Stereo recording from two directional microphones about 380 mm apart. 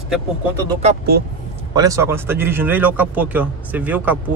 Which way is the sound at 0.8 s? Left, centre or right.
Right.